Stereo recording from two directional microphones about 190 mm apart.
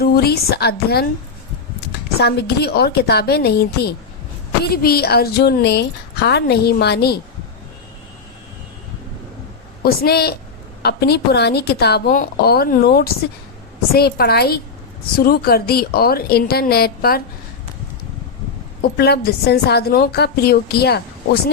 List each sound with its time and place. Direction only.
0.0 s a woman's voice: 55° left (ahead or behind)
2.1 s a woman's voice: 60° left (ahead or behind)
9.8 s a woman's voice: 55° left (ahead or behind)
18.9 s a woman's voice: 55° left (ahead or behind)